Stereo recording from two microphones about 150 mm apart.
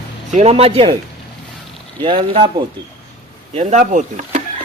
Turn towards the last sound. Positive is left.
turn(degrees=-50)  # may be behind; listen again after turning